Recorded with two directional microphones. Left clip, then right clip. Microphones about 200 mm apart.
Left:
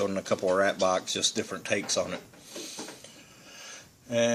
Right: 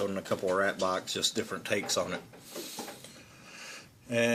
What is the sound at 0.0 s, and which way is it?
Speech, 30° left (ahead or behind).